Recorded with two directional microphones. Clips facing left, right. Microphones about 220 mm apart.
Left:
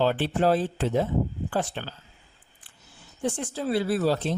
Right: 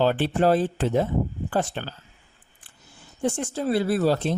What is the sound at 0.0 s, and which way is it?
Speech, 50° right (ahead or behind).